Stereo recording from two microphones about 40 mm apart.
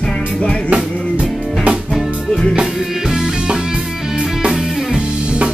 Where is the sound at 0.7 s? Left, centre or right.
Right.